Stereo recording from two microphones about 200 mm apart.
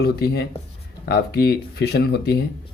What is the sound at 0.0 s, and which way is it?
Speech, 55° left (ahead or behind).